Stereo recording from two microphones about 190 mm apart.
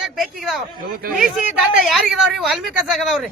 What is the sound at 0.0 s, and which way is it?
Speech, 5° right (ahead or behind).